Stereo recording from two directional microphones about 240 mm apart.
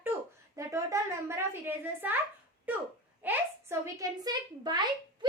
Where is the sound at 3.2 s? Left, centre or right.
Centre.